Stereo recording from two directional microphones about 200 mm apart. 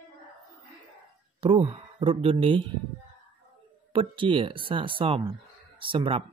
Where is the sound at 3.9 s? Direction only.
25° right (ahead or behind).